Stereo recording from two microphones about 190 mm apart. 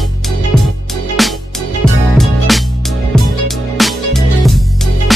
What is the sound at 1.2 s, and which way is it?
Music, centre (ahead or behind).